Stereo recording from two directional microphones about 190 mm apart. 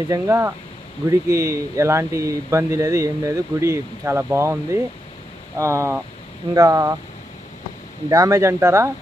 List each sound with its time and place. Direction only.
0.1 s speech: 15° right (ahead or behind)
8.1 s speech: 15° right (ahead or behind)